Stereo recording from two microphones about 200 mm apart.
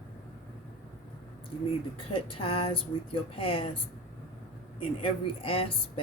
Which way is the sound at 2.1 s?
30° left (ahead or behind).